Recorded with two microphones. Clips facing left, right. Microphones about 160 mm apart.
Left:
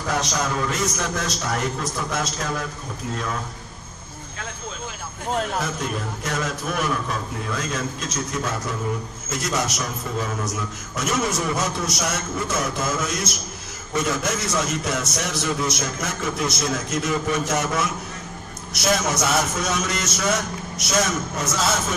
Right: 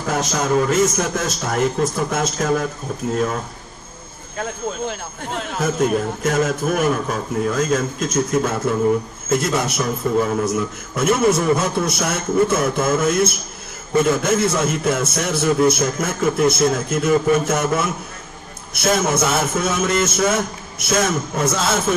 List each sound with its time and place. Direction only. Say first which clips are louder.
0.1 s a man's voice: right 6 dB; 50° right (ahead or behind)
4.4 s a man's voice: right 10 dB; 50° right (ahead or behind)